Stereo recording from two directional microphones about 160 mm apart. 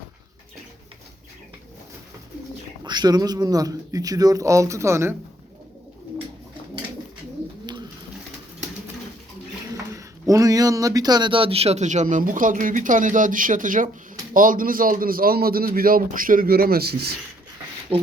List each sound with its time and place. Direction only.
2.8 s speech: 25° right (ahead or behind)
9.9 s a man's voice: 20° right (ahead or behind); by 17.2 s 80° right
17.9 s speech: 35° right (ahead or behind)